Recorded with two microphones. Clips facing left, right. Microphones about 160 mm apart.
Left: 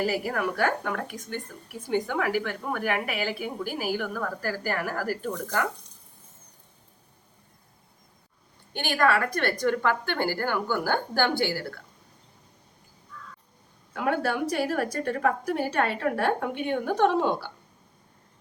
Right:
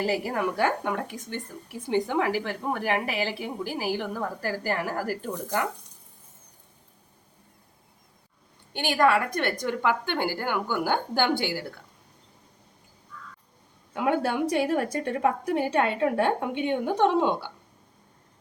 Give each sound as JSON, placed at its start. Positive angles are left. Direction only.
{"t": 0.0, "sound": "a woman's voice", "side_deg": -25}
{"t": 8.7, "sound": "a woman's voice", "side_deg": -20}
{"t": 13.9, "sound": "a woman's voice", "side_deg": -20}